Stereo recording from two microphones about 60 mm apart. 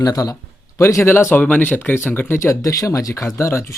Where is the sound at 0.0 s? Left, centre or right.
Left.